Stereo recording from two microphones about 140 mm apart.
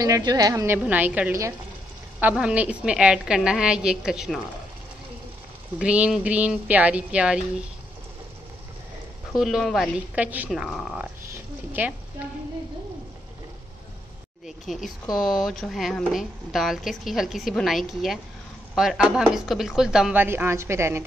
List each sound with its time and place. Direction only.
0.0 s a woman's voice: 25° right (ahead or behind); by 4.4 s 5° right (ahead or behind)
5.8 s speech: 10° right (ahead or behind)
9.3 s a woman's voice: centre (ahead or behind)
9.9 s speech: 10° right (ahead or behind)
10.5 s a woman's voice: centre (ahead or behind)
11.3 s a sound: 10° right (ahead or behind)
14.7 s a woman's voice: centre (ahead or behind); by 21.0 s 20° right (ahead or behind)